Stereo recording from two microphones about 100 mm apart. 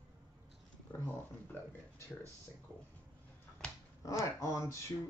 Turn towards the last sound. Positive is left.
turn(degrees=35)  # may be behind; listen again after turning